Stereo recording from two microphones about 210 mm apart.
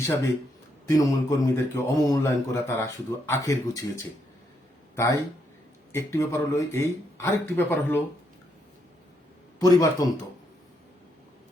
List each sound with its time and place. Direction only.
0.9 s speech: 15° left (ahead or behind)
9.6 s speech: 15° left (ahead or behind)